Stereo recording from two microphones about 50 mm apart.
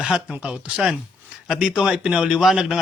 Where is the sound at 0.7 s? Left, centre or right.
Centre.